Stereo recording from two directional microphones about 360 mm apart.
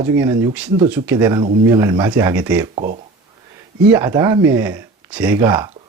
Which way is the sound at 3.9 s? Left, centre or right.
Centre.